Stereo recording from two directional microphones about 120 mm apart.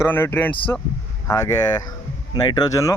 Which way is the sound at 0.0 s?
20° left (ahead or behind).